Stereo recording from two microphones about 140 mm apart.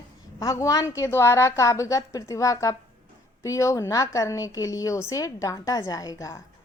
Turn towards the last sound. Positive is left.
turn(degrees=25)  # may be behind; listen again after turning